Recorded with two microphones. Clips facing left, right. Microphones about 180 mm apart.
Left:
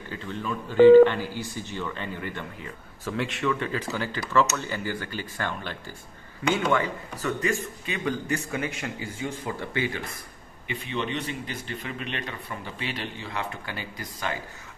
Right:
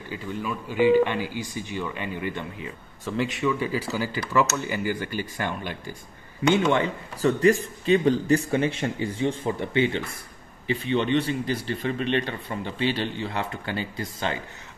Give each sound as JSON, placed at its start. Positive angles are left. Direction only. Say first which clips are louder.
{"t": 0.1, "sound": "speech", "louder": "right 1 dB", "side_deg": -10}
{"t": 3.1, "sound": "speech", "louder": "right 2 dB", "side_deg": 0}
{"t": 6.5, "sound": "speech", "louder": "right 3 dB", "side_deg": -25}